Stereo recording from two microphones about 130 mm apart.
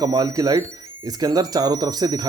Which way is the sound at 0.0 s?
30° right (ahead or behind).